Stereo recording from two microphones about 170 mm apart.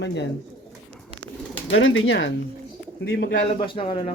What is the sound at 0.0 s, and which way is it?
Speech, 90° left.